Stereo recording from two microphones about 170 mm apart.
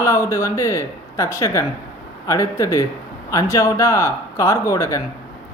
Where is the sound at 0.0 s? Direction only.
15° left (ahead or behind).